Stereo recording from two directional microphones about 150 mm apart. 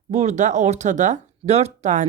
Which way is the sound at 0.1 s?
50° right (ahead or behind).